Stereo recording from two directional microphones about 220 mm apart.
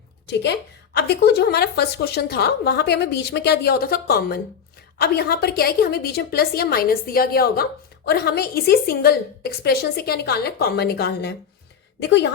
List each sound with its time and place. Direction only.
0.3 s a woman's voice: 50° left (ahead or behind)